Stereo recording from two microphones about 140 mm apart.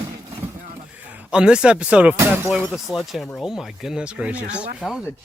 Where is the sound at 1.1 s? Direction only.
5° right (ahead or behind).